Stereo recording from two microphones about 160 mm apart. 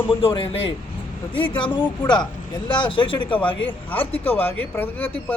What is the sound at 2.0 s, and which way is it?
A man's voice, 25° left (ahead or behind).